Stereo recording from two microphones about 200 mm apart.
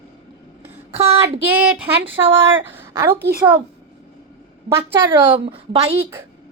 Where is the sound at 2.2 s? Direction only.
15° right (ahead or behind).